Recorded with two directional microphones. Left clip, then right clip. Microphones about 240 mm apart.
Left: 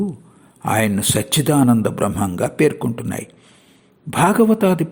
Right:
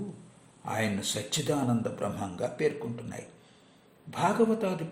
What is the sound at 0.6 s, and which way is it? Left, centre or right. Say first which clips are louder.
Speech: left 13 dB; left.